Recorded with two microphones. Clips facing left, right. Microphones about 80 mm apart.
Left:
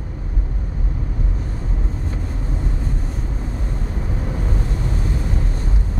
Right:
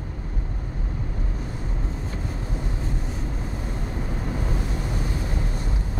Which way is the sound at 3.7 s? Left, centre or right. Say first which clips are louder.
Left 2 dB; centre.